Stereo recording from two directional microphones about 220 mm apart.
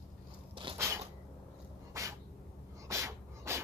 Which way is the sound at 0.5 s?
20° right (ahead or behind).